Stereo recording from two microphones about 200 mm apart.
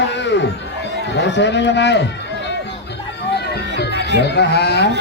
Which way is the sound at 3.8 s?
55° left (ahead or behind).